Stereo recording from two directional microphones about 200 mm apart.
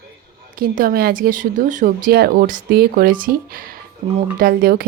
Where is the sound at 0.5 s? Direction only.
45° right (ahead or behind).